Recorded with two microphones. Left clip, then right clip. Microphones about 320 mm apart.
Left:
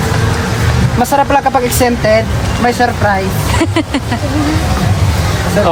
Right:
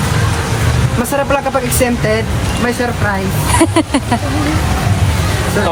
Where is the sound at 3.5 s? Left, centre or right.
Centre.